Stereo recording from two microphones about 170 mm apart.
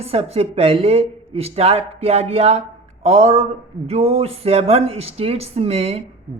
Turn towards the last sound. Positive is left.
turn(degrees=-35)  # may be behind; listen again after turning